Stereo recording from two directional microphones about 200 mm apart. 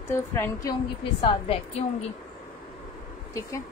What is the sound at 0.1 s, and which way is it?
Speech, 15° left (ahead or behind).